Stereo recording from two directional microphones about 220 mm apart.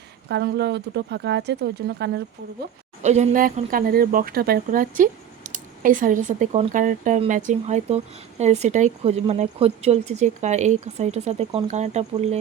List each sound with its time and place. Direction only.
0.3 s speech: 50° right (ahead or behind)
3.0 s speech: 30° right (ahead or behind)